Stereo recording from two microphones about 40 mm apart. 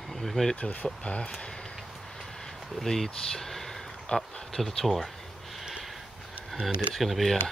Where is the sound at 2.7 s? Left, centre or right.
Centre.